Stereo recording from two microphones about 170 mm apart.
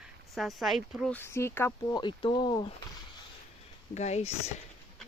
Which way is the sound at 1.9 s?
30° left (ahead or behind).